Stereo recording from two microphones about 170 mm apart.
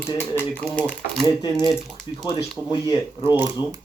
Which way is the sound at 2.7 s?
25° left (ahead or behind).